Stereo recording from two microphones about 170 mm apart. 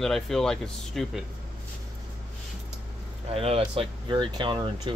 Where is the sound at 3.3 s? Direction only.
35° right (ahead or behind).